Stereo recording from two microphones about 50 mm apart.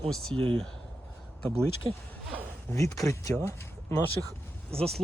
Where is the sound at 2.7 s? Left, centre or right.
Left.